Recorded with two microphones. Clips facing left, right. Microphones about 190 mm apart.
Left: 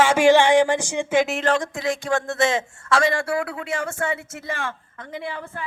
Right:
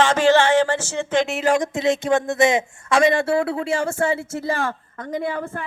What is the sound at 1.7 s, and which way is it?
Speech, 25° right (ahead or behind).